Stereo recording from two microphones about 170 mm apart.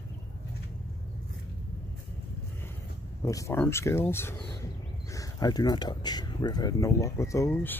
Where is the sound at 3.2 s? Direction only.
20° left (ahead or behind).